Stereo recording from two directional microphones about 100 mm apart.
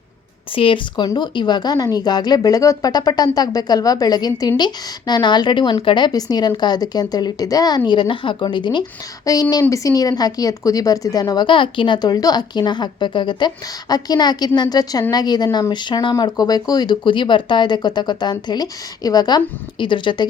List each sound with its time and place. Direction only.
0.5 s speech: 60° left (ahead or behind)
1.0 s speech: 45° left (ahead or behind)
7.9 s speech: 55° left (ahead or behind)
9.2 s speech: 40° left (ahead or behind)
19.8 s speech: 55° left (ahead or behind)